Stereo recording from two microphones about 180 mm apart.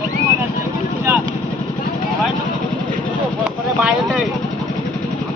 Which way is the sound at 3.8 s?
5° right (ahead or behind).